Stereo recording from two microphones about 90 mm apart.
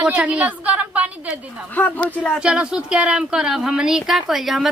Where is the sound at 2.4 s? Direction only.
10° right (ahead or behind).